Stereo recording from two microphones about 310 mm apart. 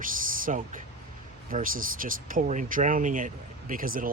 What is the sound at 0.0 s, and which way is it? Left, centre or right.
Speech, right.